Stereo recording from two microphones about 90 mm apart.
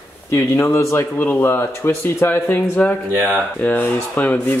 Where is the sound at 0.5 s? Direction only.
30° left (ahead or behind).